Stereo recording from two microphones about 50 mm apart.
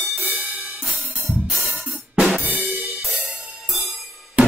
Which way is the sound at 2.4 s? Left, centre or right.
Right.